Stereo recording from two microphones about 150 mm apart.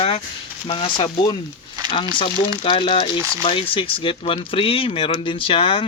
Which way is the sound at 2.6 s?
35° left (ahead or behind).